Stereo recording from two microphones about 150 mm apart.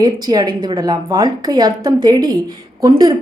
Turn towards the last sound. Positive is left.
turn(degrees=-25)  # may be behind; listen again after turning